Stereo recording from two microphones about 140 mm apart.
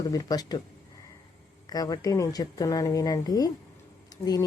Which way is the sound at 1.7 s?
25° left (ahead or behind).